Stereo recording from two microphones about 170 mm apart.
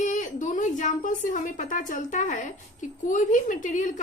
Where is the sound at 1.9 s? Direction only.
50° left (ahead or behind).